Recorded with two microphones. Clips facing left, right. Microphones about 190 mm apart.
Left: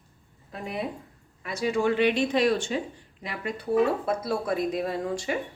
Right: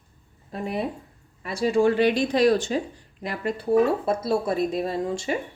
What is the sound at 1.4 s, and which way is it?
Speech, 30° right (ahead or behind).